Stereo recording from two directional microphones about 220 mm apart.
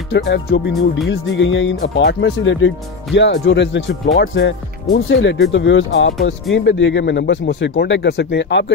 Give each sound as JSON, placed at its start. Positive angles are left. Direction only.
{"t": 0.1, "sound": "speech", "side_deg": 50}